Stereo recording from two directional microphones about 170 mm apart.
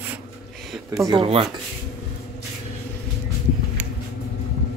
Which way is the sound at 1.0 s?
30° right (ahead or behind).